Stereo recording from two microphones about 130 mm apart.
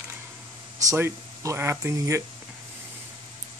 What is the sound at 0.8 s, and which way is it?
Speech, 20° right (ahead or behind).